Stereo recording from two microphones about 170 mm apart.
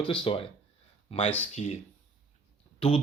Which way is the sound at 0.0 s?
30° left (ahead or behind).